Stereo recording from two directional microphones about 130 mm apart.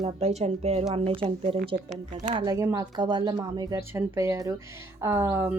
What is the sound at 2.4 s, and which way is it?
Speech, 25° right (ahead or behind).